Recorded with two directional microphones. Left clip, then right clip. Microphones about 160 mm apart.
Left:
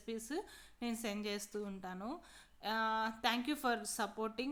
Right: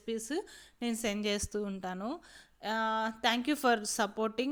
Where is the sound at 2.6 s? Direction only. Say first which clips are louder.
Right 4 dB; 35° right (ahead or behind).